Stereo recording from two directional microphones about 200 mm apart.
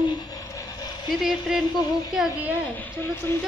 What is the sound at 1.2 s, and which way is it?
Speech, 5° right (ahead or behind).